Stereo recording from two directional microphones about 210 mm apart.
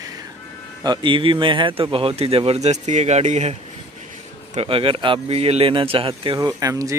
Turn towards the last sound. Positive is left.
turn(degrees=-15)  # may be behind; listen again after turning